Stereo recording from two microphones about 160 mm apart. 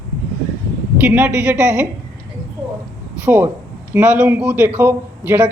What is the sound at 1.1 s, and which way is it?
Speech, 10° right (ahead or behind).